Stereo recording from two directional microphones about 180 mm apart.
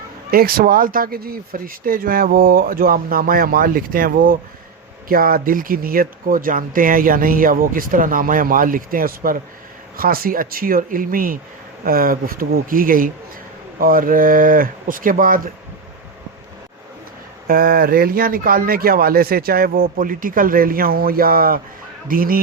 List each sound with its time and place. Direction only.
0.3 s speech: 55° right (ahead or behind)
17.5 s speech: 55° right (ahead or behind)